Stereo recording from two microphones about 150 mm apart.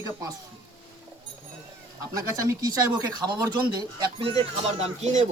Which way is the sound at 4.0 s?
35° right (ahead or behind).